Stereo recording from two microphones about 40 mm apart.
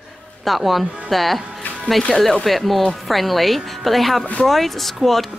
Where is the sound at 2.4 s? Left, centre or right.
Centre.